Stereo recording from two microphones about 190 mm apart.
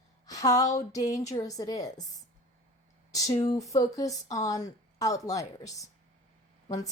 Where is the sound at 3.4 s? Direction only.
15° left (ahead or behind).